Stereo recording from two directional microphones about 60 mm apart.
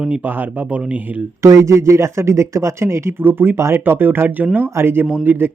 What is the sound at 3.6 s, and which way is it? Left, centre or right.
Speech, right.